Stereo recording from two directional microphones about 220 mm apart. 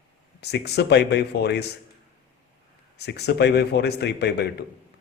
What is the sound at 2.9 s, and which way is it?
A man's voice, 50° left (ahead or behind).